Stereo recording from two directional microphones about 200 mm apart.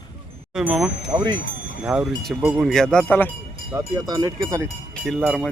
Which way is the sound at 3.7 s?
20° right (ahead or behind).